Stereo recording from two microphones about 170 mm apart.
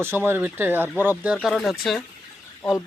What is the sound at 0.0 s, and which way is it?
Speech, 15° right (ahead or behind).